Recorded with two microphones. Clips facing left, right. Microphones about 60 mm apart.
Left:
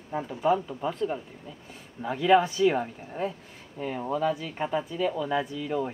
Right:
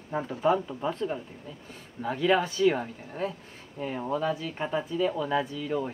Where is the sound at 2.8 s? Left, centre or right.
Centre.